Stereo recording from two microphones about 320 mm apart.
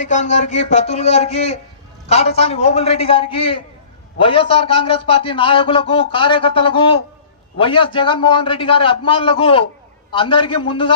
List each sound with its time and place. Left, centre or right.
0.0 s a man's voice: left